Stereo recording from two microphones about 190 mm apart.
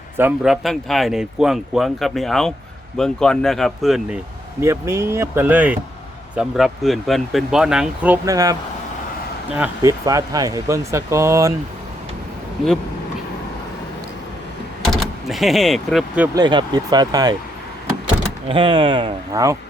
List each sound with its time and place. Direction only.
0.2 s speech: 5° right (ahead or behind)
4.6 s speech: 15° right (ahead or behind)
9.6 s speech: 15° right (ahead or behind)
15.3 s speech: centre (ahead or behind)
16.3 s speech: 25° right (ahead or behind)
18.4 s speech: 25° right (ahead or behind)